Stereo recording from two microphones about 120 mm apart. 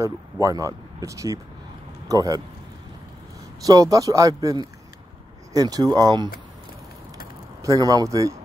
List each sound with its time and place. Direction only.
0.0 s speech: 25° right (ahead or behind)
3.6 s a man's voice: 30° right (ahead or behind)
7.6 s a man's voice: 30° right (ahead or behind)